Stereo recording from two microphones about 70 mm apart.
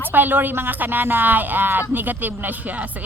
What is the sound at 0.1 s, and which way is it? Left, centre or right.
Speech, right.